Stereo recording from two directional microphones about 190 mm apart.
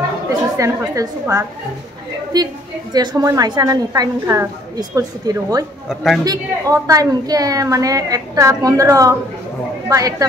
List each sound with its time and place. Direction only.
0.3 s a woman's voice: 15° right (ahead or behind)
5.9 s a man's voice: centre (ahead or behind)
6.2 s a woman's voice: 20° right (ahead or behind)